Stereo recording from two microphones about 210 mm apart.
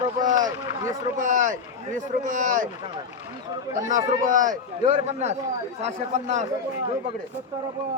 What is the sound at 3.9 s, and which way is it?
Speech, 40° right (ahead or behind).